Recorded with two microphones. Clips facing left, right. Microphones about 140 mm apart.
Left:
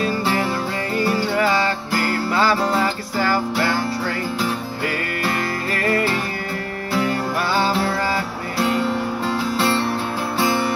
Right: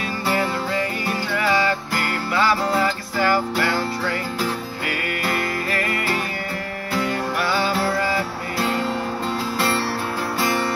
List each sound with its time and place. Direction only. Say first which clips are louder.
0.9 s music: left 5 dB; 35° left (ahead or behind)
9.6 s music: left 2 dB; 20° left (ahead or behind)